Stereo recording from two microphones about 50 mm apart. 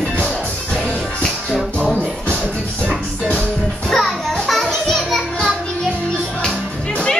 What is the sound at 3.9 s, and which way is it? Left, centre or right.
Music, centre.